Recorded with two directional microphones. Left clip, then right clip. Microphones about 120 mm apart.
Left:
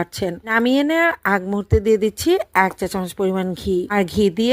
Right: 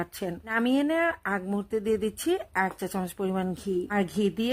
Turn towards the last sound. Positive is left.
turn(degrees=35)  # may be behind; listen again after turning